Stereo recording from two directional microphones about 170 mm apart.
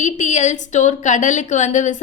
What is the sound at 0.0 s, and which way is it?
A woman's voice, 45° left (ahead or behind).